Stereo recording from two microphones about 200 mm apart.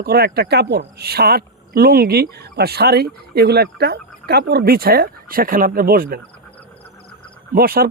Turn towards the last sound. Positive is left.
turn(degrees=-50)  # may be behind; listen again after turning